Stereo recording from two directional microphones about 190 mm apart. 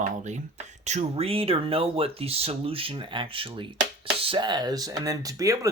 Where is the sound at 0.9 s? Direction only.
35° right (ahead or behind).